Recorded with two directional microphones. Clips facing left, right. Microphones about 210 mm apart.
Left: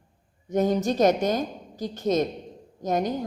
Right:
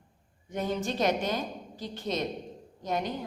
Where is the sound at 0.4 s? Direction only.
40° left (ahead or behind).